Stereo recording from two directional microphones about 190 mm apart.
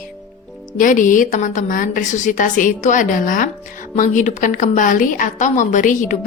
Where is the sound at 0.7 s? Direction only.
45° left (ahead or behind).